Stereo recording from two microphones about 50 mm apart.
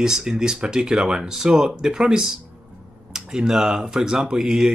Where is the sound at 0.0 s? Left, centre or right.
Centre.